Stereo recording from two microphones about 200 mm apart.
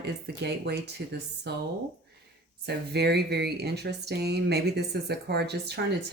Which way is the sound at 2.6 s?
55° right (ahead or behind).